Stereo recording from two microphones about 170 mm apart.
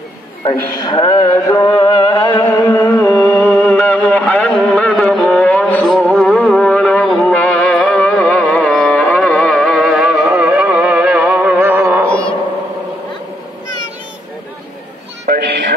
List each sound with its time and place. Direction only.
0.7 s speech: 25° left (ahead or behind)
1.3 s music: 25° left (ahead or behind); by 12.1 s 15° right (ahead or behind)
15.2 s music: 60° right (ahead or behind)